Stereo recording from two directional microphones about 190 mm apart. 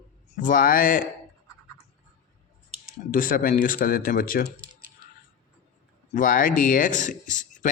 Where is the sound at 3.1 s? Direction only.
45° left (ahead or behind).